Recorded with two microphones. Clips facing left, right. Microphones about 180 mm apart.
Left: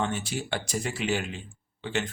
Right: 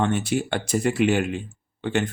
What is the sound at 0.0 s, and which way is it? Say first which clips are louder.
Speech: right 7 dB; 60° right (ahead or behind).